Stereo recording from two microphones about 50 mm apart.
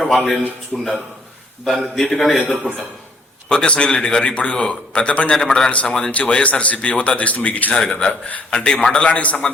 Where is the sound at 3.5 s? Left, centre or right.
Centre.